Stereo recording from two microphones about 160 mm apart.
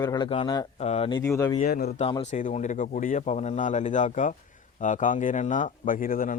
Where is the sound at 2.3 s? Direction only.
50° left (ahead or behind).